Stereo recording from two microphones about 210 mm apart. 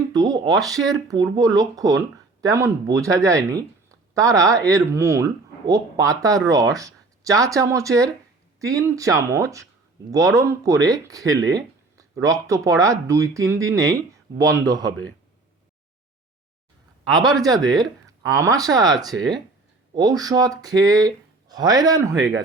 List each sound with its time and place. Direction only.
0.1 s a sound: 20° right (ahead or behind)
0.9 s a man's voice: 15° right (ahead or behind)
17.1 s a man's voice: 20° right (ahead or behind)
19.0 s speech: centre (ahead or behind)
19.9 s speech: 15° right (ahead or behind)